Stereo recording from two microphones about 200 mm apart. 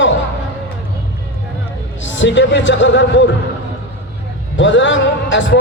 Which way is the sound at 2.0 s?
65° left (ahead or behind).